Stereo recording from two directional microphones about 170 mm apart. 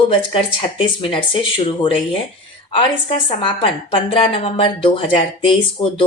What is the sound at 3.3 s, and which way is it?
A woman's voice, 30° left (ahead or behind).